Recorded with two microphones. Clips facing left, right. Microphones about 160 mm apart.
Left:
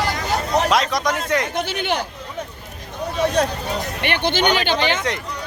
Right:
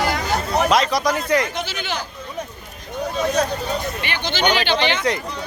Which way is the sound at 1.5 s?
60° left (ahead or behind).